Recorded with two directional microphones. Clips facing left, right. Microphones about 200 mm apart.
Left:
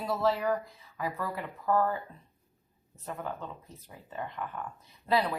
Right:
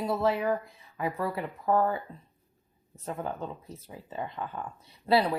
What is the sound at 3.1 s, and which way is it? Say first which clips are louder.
Speech: right 3 dB; 30° right (ahead or behind).